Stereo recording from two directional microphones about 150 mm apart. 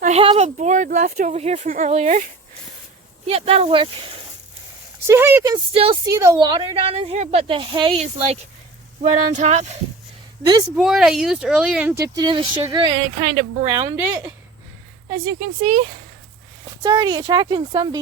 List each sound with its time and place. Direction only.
0.0 s speech: 45° right (ahead or behind)
0.4 s speech: 55° right (ahead or behind)
3.2 s speech: 40° right (ahead or behind)
5.0 s speech: 15° right (ahead or behind)
5.5 s speech: 35° right (ahead or behind)
6.1 s speech: 20° right (ahead or behind)
6.5 s speech: 35° right (ahead or behind); by 9.7 s 50° right (ahead or behind)
10.8 s speech: 5° right (ahead or behind)
12.1 s speech: 30° right (ahead or behind)
13.7 s speech: 25° right (ahead or behind)
16.8 s speech: 30° right (ahead or behind)